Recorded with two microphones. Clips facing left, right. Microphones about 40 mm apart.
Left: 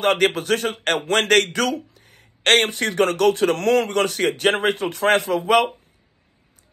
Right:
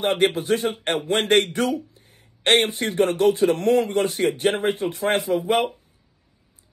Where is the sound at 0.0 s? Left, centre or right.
Left.